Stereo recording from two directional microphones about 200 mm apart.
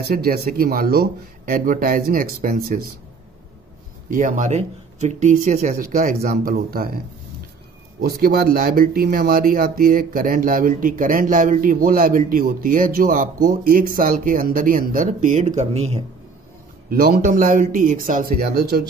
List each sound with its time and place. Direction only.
0.0 s speech: 50° right (ahead or behind)
4.1 s speech: 40° right (ahead or behind)
8.0 s speech: 50° right (ahead or behind); by 16.0 s 30° right (ahead or behind)
16.9 s speech: 50° right (ahead or behind)